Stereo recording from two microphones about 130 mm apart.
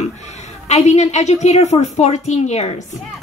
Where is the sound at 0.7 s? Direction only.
60° left (ahead or behind).